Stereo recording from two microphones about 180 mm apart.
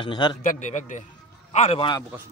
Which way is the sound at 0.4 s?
45° left (ahead or behind).